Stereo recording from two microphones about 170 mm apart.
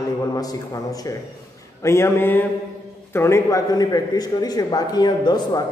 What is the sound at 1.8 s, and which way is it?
A man's voice, 15° left (ahead or behind).